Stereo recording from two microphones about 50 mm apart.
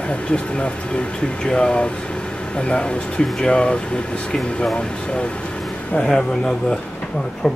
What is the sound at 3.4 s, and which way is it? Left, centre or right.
Speech, centre.